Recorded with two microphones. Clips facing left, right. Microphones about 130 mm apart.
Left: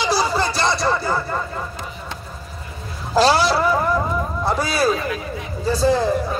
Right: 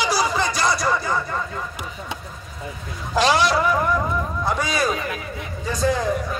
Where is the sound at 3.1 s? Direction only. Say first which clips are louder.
Left 2 dB; 35° left (ahead or behind).